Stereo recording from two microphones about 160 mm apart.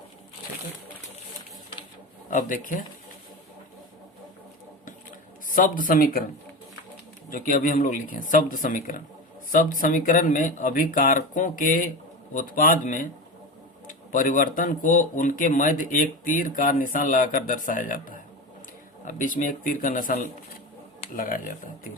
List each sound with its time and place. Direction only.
2.3 s speech: 55° left (ahead or behind)
5.5 s speech: 60° left (ahead or behind)
7.3 s speech: 60° left (ahead or behind)
14.1 s speech: 55° left (ahead or behind)